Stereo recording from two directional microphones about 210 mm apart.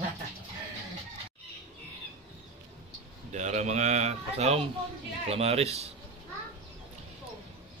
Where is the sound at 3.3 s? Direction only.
35° right (ahead or behind).